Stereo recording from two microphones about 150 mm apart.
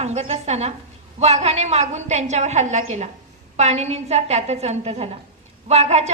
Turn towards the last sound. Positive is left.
turn(degrees=-45)  # may be behind; listen again after turning